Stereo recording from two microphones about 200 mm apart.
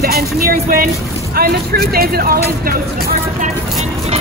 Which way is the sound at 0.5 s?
45° right (ahead or behind).